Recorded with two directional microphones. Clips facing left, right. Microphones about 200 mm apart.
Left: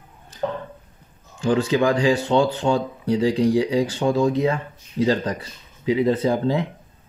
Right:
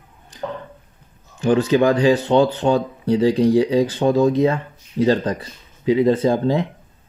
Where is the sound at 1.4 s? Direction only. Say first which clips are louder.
Right 3 dB; 20° right (ahead or behind).